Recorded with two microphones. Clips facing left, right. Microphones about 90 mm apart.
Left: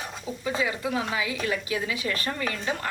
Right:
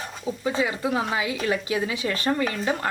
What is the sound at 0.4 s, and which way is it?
Speech, 30° right (ahead or behind).